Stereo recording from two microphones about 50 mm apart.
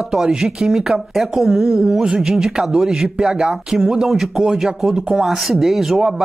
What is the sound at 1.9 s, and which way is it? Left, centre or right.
Speech, centre.